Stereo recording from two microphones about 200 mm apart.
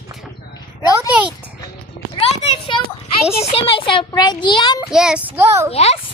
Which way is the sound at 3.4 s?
25° left (ahead or behind).